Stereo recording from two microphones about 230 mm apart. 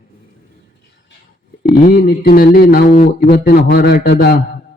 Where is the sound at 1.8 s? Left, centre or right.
Left.